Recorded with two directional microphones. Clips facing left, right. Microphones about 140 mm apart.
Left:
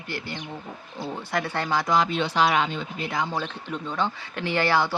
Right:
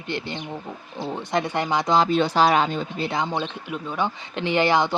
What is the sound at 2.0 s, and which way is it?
Speech, 40° right (ahead or behind).